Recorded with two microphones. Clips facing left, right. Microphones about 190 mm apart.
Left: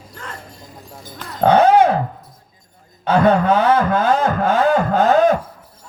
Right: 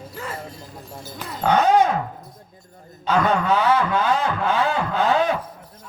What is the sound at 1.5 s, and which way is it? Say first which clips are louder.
Dog: left 4 dB; 60° left (ahead or behind).